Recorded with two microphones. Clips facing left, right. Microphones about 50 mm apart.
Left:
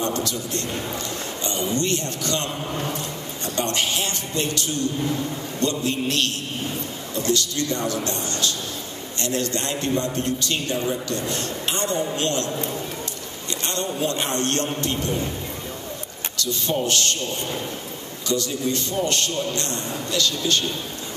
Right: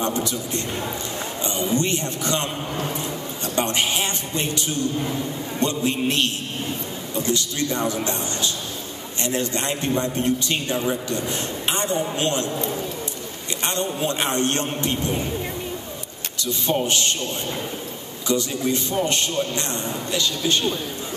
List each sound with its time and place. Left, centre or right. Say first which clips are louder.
0.0 s a man's voice: right 1 dB; centre
14.0 s a man's voice: right 2 dB; right
16.3 s a man's voice: right 1 dB; right
18.3 s a man's voice: right 2 dB; right